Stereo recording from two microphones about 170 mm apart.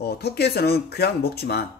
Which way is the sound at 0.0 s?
70° left (ahead or behind).